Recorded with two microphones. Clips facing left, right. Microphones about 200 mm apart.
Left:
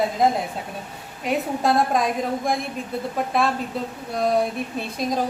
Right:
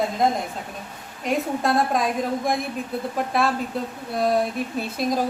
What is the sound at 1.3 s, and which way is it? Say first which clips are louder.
A woman's voice: left 1 dB; centre (ahead or behind).